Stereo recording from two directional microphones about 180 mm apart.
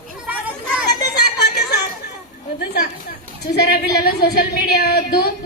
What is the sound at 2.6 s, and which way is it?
A woman's voice, 65° left (ahead or behind).